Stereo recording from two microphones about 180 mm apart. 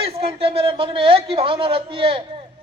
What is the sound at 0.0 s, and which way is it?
A man's voice, 30° right (ahead or behind).